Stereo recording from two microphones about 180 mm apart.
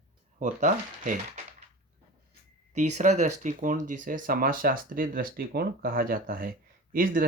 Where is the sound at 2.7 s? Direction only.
40° right (ahead or behind).